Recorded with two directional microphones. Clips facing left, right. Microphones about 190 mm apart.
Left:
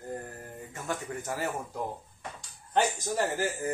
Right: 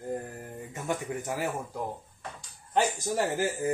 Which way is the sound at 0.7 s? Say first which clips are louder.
Right 3 dB; 15° right (ahead or behind).